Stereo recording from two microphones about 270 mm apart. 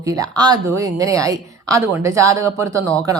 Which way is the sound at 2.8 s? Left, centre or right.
Centre.